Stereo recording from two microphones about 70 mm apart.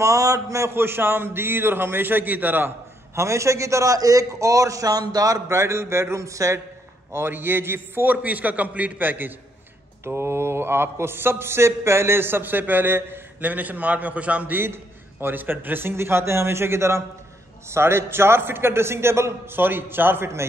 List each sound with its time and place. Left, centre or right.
0.0 s a man's voice: right
3.2 s a man's voice: right
7.1 s a man's voice: right
10.0 s a man's voice: right; by 14.6 s centre
14.6 s a man's voice: right